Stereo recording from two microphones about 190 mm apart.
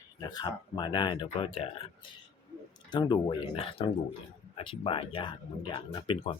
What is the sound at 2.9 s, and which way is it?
Speech, 20° left (ahead or behind).